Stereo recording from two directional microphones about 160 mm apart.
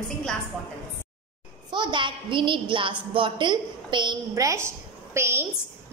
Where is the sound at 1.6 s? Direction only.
30° right (ahead or behind).